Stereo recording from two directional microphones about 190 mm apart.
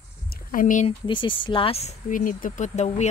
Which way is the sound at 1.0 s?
25° left (ahead or behind).